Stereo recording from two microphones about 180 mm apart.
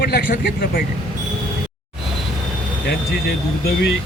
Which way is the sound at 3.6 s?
70° left (ahead or behind).